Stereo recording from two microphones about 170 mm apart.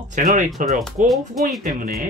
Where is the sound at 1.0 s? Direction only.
Centre (ahead or behind).